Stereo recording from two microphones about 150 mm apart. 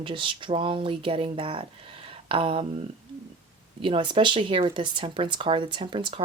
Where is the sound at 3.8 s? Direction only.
35° right (ahead or behind).